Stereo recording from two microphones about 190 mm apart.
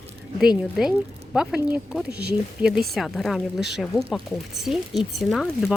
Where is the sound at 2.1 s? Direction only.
60° right (ahead or behind).